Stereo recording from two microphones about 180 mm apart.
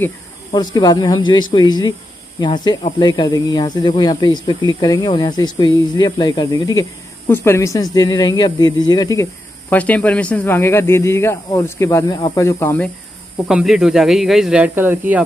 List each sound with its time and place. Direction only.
0.5 s speech: 20° left (ahead or behind)
13.5 s speech: 5° right (ahead or behind)